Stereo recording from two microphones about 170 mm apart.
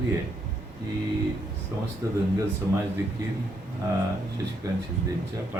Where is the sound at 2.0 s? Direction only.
20° right (ahead or behind).